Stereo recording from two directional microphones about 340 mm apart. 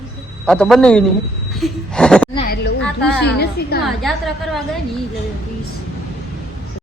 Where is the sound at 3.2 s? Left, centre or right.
Left.